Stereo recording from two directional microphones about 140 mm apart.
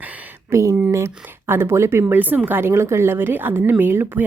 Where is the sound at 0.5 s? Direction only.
20° right (ahead or behind).